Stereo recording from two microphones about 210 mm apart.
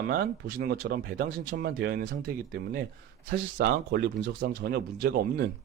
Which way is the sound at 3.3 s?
45° right (ahead or behind).